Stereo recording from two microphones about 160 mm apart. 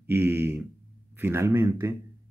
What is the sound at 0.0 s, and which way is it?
Speech, 15° right (ahead or behind).